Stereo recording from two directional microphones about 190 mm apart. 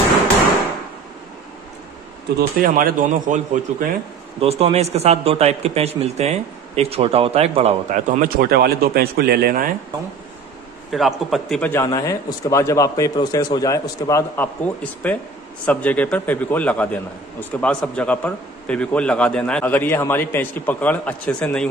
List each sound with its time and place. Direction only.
2.3 s a man's voice: 45° right (ahead or behind)
4.4 s a man's voice: 30° right (ahead or behind); by 9.7 s 50° right (ahead or behind)
10.9 s a man's voice: centre (ahead or behind)